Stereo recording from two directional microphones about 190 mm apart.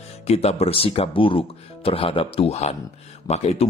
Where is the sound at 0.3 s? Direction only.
35° left (ahead or behind).